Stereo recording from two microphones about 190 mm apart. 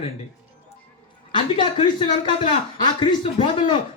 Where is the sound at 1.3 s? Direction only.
25° left (ahead or behind).